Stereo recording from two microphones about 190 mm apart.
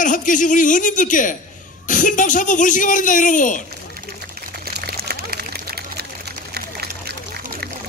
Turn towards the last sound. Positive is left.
turn(degrees=-55)  # may be behind; listen again after turning